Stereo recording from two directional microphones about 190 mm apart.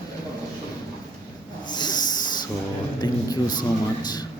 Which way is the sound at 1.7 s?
20° left (ahead or behind).